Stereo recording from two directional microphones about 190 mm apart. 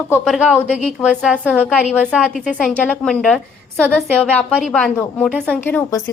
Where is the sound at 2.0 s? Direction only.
5° right (ahead or behind).